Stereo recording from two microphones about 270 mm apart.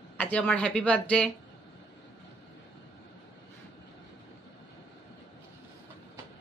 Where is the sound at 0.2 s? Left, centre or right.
Centre.